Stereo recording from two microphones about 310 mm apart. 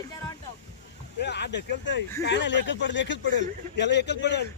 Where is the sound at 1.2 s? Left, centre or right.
Left.